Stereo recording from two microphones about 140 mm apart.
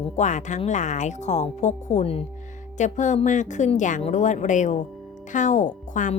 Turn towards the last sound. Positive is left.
turn(degrees=60)  # may be behind; listen again after turning